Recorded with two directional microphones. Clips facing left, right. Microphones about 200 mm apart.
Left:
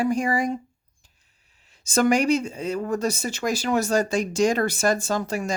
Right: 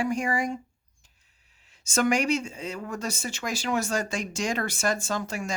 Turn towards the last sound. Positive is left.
turn(degrees=35)  # may be behind; listen again after turning